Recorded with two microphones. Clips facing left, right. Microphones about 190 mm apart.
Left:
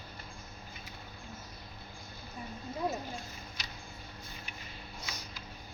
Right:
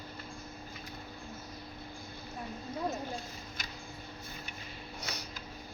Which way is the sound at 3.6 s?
50° right (ahead or behind).